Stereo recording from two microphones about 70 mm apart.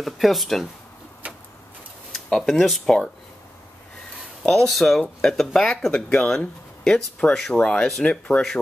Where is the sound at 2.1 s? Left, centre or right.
Centre.